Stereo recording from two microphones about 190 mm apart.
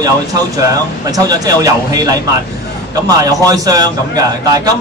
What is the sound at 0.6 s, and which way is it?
A man's voice, 20° right (ahead or behind).